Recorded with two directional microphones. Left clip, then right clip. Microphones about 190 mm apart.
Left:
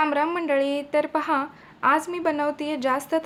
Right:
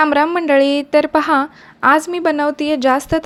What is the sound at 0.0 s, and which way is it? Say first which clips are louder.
A woman's voice: right 9 dB; 40° right (ahead or behind).